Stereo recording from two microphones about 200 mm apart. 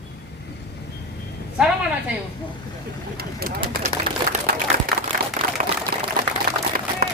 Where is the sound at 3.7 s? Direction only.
40° right (ahead or behind).